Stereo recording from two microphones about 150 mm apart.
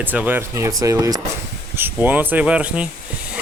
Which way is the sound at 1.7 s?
15° right (ahead or behind).